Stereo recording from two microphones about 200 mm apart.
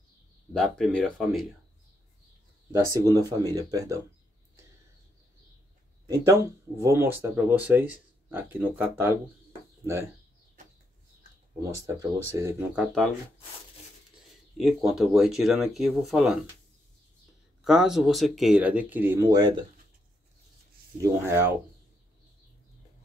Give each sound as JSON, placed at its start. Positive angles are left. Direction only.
{"t": 0.5, "sound": "speech", "side_deg": 0}
{"t": 2.7, "sound": "speech", "side_deg": -20}
{"t": 6.0, "sound": "speech", "side_deg": -15}
{"t": 11.6, "sound": "speech", "side_deg": -15}
{"t": 12.8, "sound": "speech", "side_deg": 0}
{"t": 14.6, "sound": "speech", "side_deg": 0}
{"t": 17.6, "sound": "speech", "side_deg": 0}
{"t": 21.0, "sound": "speech", "side_deg": -15}